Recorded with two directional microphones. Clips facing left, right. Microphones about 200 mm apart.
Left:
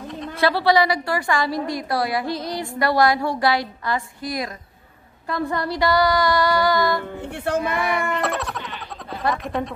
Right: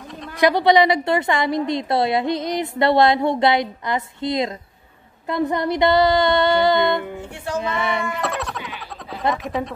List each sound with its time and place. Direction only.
0.4 s a woman's voice: 15° right (ahead or behind)
7.2 s speech: 60° left (ahead or behind)
7.6 s a woman's voice: 25° right (ahead or behind)
8.1 s a sound: centre (ahead or behind)
9.3 s speech: centre (ahead or behind)